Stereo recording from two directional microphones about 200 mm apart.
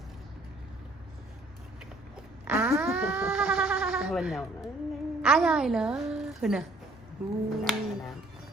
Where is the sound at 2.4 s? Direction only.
5° right (ahead or behind).